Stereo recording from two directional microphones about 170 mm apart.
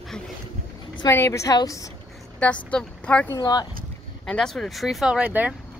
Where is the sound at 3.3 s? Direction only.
25° left (ahead or behind).